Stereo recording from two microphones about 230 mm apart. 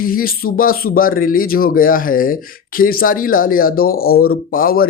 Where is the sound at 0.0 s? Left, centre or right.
Left.